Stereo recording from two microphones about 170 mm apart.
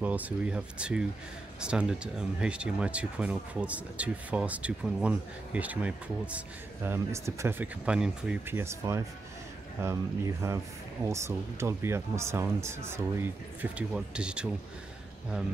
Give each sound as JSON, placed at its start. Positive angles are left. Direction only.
{"t": 0.0, "sound": "speech", "side_deg": -10}